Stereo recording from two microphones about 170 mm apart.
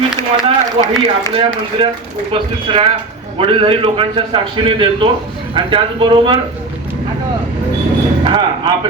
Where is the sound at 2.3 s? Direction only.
30° right (ahead or behind).